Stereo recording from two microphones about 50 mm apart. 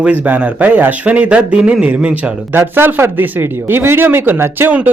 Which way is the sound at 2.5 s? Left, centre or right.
Right.